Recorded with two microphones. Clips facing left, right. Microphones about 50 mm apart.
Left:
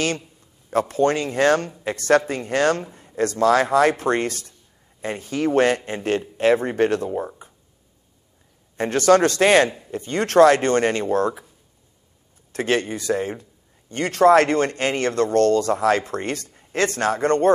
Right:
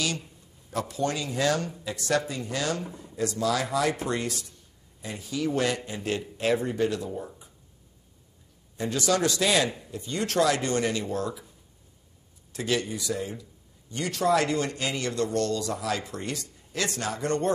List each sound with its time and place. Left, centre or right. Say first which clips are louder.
0.7 s a man's voice: left 9 dB; left
8.7 s a man's voice: left 10 dB; left
12.5 s a man's voice: left 6 dB; left